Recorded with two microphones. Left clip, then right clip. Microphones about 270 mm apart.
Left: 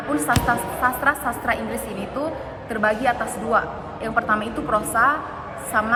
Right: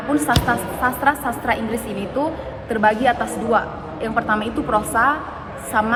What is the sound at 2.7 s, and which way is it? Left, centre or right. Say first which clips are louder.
A woman's voice: right 4 dB; centre.